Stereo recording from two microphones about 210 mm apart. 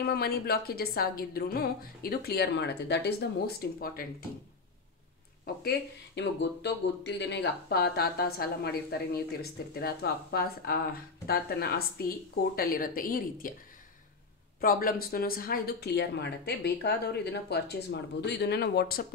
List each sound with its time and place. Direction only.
0.0 s speech: 50° left (ahead or behind)
5.6 s speech: 50° left (ahead or behind)
14.6 s speech: 45° left (ahead or behind)